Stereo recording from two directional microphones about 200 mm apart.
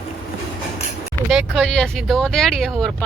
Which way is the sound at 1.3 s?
Centre (ahead or behind).